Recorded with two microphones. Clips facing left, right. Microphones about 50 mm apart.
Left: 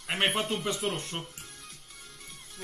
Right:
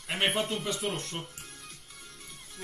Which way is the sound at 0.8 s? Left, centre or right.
Centre.